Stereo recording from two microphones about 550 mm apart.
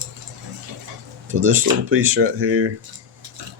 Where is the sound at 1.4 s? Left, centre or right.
Right.